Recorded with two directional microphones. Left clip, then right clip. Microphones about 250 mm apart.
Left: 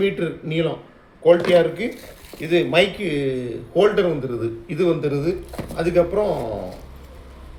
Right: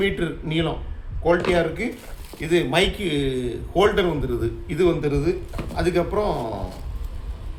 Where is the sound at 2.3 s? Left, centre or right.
Right.